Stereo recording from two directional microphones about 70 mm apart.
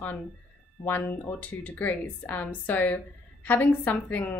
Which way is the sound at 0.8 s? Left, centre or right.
Left.